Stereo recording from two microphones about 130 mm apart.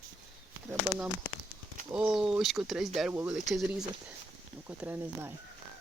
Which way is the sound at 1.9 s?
5° right (ahead or behind).